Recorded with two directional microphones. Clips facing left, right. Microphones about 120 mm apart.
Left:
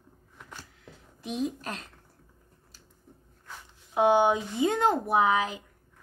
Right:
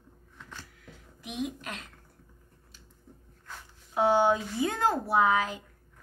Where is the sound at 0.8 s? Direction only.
30° left (ahead or behind).